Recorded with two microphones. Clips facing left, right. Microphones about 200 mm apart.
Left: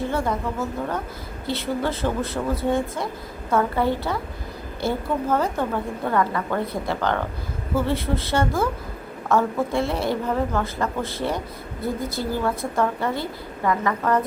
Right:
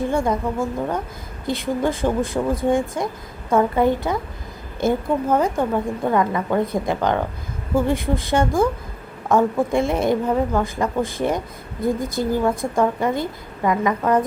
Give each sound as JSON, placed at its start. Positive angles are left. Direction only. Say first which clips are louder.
{"t": 0.1, "sound": "a woman's voice", "louder": "right 4 dB", "side_deg": -15}
{"t": 12.4, "sound": "a woman's voice", "louder": "right 3 dB", "side_deg": -15}